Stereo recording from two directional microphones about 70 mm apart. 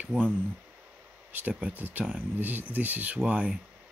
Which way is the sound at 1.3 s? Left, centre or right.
Right.